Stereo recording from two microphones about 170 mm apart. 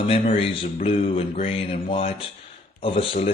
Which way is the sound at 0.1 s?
35° left (ahead or behind).